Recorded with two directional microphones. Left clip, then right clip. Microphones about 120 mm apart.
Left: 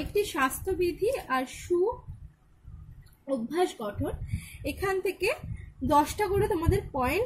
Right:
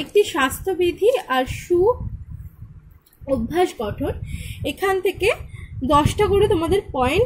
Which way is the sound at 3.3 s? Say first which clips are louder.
Right 8 dB; 35° right (ahead or behind).